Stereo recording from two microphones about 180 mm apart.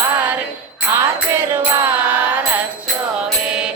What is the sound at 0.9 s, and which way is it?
Music, 15° right (ahead or behind).